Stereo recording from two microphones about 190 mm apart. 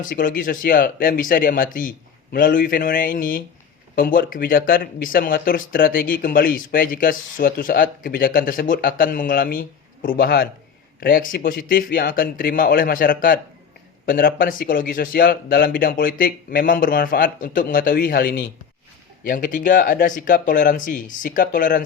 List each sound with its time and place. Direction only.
0.0 s speech: 45° left (ahead or behind)